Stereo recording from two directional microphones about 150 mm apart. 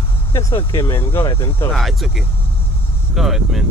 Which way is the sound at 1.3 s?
35° left (ahead or behind).